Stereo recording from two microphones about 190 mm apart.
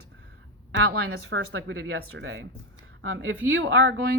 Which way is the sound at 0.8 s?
70° right (ahead or behind).